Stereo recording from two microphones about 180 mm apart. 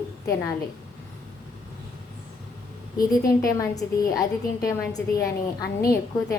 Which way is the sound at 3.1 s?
20° left (ahead or behind).